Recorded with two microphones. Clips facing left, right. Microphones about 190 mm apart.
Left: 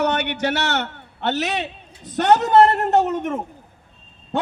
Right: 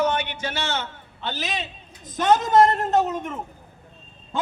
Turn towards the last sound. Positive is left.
turn(degrees=65)  # may be behind; listen again after turning